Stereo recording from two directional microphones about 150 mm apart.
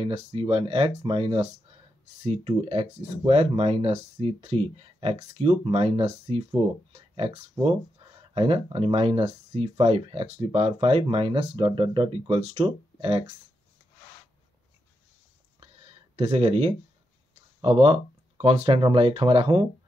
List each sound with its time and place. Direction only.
0.0 s speech: 40° right (ahead or behind)
7.6 s speech: 30° right (ahead or behind)
16.2 s speech: 40° right (ahead or behind)